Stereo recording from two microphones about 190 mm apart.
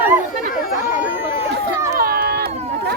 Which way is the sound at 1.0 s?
10° right (ahead or behind).